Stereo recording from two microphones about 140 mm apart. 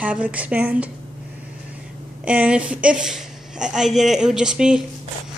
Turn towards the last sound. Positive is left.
turn(degrees=-5)  # may be behind; listen again after turning